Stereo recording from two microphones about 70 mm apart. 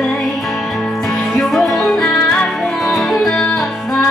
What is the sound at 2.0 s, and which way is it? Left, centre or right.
Music, centre.